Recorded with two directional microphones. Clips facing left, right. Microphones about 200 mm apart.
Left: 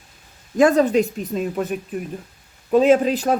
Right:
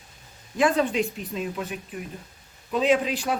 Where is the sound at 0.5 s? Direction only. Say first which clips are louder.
Left 7 dB; 45° left (ahead or behind).